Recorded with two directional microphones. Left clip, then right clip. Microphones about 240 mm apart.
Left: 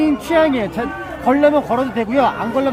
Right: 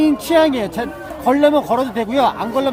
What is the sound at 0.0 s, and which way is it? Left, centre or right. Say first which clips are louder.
A man's voice: right 1 dB; right.